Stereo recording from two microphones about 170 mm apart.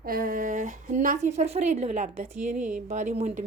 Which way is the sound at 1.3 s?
40° right (ahead or behind).